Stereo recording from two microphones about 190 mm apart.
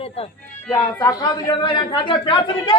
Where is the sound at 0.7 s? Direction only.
15° left (ahead or behind).